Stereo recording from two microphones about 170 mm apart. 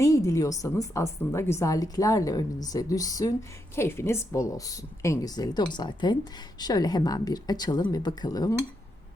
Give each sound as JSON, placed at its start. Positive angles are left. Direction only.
{"t": 0.0, "sound": "a woman's voice", "side_deg": 20}